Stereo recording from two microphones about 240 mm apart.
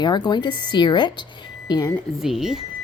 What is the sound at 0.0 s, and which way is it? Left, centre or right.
Speech, centre.